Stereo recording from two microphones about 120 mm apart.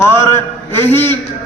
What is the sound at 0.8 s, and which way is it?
Speech, 15° left (ahead or behind).